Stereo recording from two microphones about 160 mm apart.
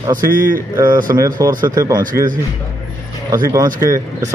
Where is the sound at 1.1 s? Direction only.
20° right (ahead or behind).